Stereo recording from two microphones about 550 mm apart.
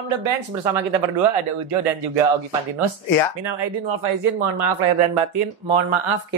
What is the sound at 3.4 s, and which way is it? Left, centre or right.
Speech, right.